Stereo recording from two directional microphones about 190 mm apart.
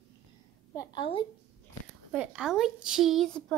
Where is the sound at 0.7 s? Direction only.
20° left (ahead or behind).